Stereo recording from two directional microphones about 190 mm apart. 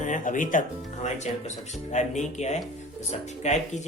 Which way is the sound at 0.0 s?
40° left (ahead or behind).